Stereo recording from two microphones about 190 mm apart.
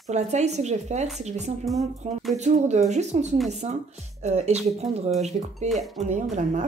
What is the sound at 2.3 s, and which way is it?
Speech, 35° right (ahead or behind).